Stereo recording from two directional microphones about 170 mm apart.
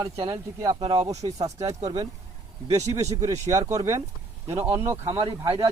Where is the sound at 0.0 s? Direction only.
20° right (ahead or behind).